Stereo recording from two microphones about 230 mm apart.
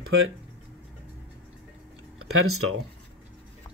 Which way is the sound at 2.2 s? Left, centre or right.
Right.